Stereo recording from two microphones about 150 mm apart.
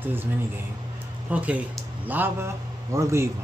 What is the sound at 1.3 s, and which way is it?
A man's voice, 10° right (ahead or behind).